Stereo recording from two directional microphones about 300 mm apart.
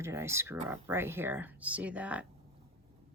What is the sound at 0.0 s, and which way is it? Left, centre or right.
Speech, centre.